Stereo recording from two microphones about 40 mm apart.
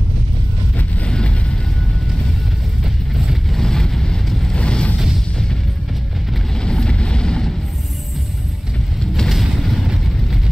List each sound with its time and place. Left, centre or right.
1.0 s vehicle: left
2.8 s vehicle: centre
3.5 s vehicle: centre
4.3 s vehicle: centre
4.6 s a sound: left
4.9 s music: centre
6.6 s vehicle: left
9.3 s vehicle: centre